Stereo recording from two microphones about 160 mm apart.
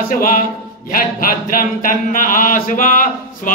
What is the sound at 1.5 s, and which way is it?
Music, 60° left (ahead or behind).